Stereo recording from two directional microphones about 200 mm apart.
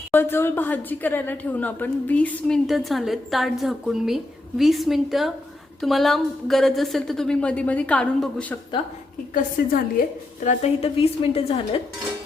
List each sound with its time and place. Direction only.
0.1 s a woman's voice: 10° left (ahead or behind)
9.6 s a woman's voice: 50° left (ahead or behind)
10.4 s a woman's voice: 30° left (ahead or behind)